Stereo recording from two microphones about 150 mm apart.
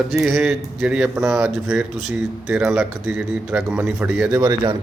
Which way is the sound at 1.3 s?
5° right (ahead or behind).